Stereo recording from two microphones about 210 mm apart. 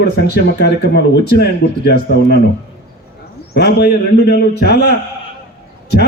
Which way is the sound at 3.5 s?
50° left (ahead or behind).